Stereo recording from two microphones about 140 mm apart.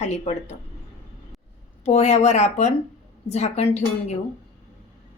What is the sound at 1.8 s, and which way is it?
A woman's voice, 55° left (ahead or behind).